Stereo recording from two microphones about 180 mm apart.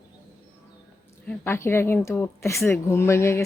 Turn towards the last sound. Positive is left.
turn(degrees=15)  # may be behind; listen again after turning